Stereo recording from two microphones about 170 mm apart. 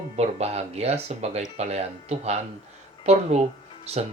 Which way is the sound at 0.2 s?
40° right (ahead or behind).